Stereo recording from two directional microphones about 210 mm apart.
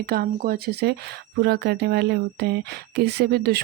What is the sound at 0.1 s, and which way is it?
A woman's voice, 45° right (ahead or behind).